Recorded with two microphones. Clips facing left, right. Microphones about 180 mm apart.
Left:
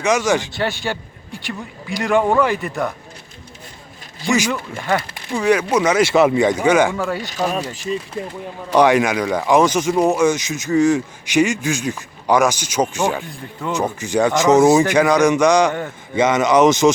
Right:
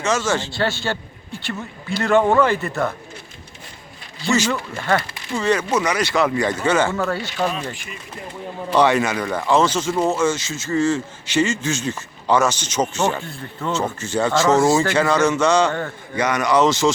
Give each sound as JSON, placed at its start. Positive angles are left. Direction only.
{"t": 0.0, "sound": "speech", "side_deg": 15}
{"t": 4.2, "sound": "speech", "side_deg": 15}
{"t": 5.8, "sound": "speech", "side_deg": 25}
{"t": 7.5, "sound": "speech", "side_deg": 40}
{"t": 8.7, "sound": "speech", "side_deg": 15}